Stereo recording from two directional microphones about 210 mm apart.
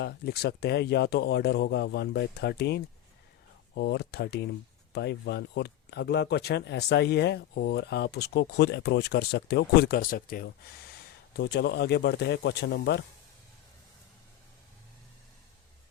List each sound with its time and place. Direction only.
0.0 s speech: 50° left (ahead or behind)